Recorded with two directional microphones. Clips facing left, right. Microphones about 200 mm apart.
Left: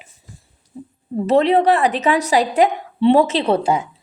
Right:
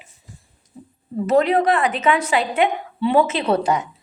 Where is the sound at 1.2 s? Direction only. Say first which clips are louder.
Left 2 dB; 30° left (ahead or behind).